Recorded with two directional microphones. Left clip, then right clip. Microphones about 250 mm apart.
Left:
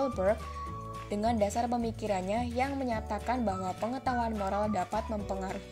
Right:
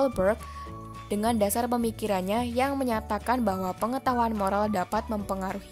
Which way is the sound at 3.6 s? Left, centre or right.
Right.